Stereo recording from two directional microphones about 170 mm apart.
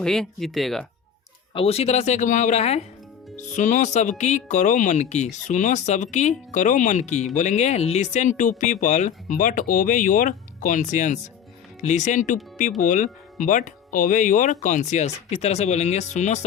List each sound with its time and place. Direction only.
0.0 s speech: 5° left (ahead or behind)
1.5 s speech: 35° left (ahead or behind)